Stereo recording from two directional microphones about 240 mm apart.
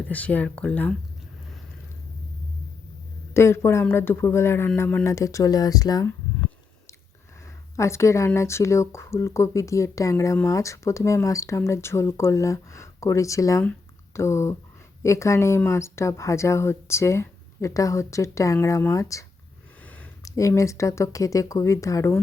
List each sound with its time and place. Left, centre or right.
0.1 s speech: centre
3.3 s speech: centre